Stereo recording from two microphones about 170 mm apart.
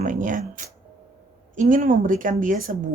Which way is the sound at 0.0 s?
50° right (ahead or behind).